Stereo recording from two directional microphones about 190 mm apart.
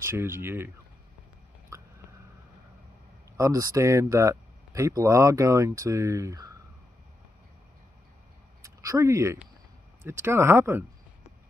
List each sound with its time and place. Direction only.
0.0 s speech: 15° right (ahead or behind)
3.3 s speech: 15° right (ahead or behind)
8.6 s speech: 15° right (ahead or behind)